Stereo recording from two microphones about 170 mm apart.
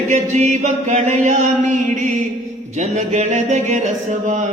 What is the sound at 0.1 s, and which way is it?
Chant, 45° right (ahead or behind).